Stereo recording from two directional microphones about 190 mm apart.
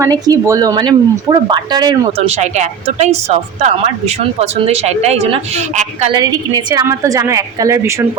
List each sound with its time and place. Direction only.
0.0 s speech: 15° right (ahead or behind); by 6.1 s 35° right (ahead or behind)
6.1 s a woman's voice: 20° right (ahead or behind)